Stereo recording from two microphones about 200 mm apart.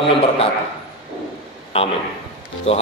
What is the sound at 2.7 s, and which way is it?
Speech, 30° left (ahead or behind).